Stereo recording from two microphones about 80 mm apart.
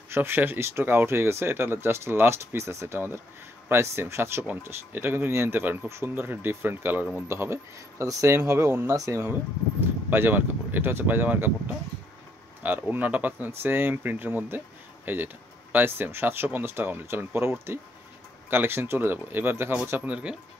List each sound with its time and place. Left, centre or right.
0.1 s speech: right
9.8 s speech: right
12.9 s speech: right
20.1 s speech: centre